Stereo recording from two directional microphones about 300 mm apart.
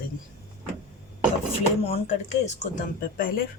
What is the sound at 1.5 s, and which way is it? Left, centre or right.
A woman's voice, centre.